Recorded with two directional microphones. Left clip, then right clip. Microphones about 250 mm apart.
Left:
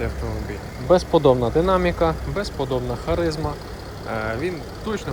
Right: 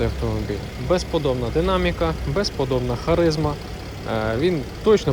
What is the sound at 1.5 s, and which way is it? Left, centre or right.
Speech, centre.